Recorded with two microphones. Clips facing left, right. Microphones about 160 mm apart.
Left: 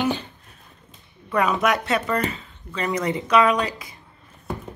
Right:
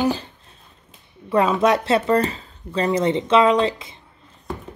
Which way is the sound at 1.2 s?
25° right (ahead or behind).